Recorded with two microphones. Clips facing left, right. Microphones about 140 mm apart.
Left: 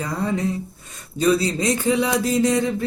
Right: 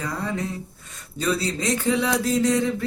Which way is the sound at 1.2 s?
15° left (ahead or behind).